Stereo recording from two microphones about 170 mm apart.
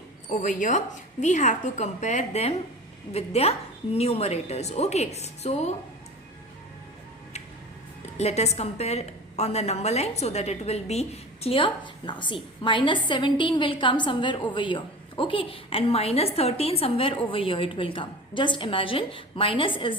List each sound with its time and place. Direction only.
0.3 s a woman's voice: 45° left (ahead or behind)
8.2 s a woman's voice: 40° left (ahead or behind)